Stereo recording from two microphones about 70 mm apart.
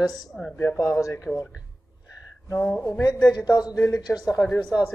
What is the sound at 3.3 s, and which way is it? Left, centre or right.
Speech, left.